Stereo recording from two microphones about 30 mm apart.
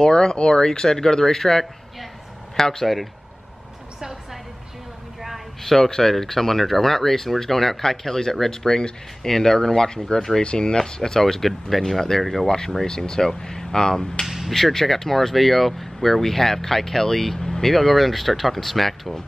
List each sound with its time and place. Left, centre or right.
0.0 s speech: left
4.0 s a sound: centre
5.6 s a sound: centre
6.0 s speech: centre
10.4 s speech: left
10.8 s speech: left; by 12.4 s centre
12.4 s speech: left
14.2 s a sound: centre
14.5 s speech: centre